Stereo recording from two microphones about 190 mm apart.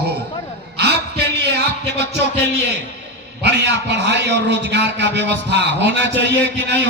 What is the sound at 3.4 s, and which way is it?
A man's voice, 65° right (ahead or behind).